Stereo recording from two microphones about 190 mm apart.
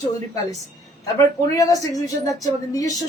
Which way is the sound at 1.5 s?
20° left (ahead or behind).